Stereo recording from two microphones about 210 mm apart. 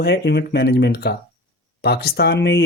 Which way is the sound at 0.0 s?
50° left (ahead or behind).